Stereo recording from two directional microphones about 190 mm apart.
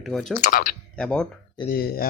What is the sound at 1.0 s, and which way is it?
Speech, 5° left (ahead or behind).